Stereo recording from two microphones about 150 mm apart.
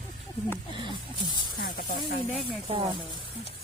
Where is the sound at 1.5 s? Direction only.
85° left.